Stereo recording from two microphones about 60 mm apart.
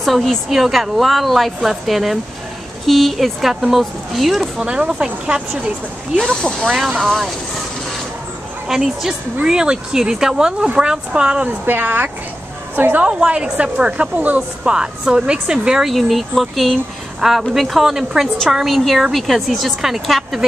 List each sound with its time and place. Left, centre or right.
0.0 s speech: centre
6.3 s speech: centre
6.8 s speech: centre
8.6 s speech: centre
11.4 s a woman's voice: right
13.0 s speech: centre
14.7 s speech: centre
15.8 s speech: centre